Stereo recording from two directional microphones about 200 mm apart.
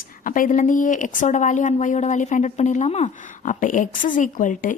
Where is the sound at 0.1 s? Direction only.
40° left (ahead or behind).